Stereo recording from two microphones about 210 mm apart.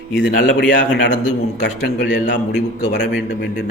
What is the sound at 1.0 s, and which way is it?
A man's voice, 55° left (ahead or behind).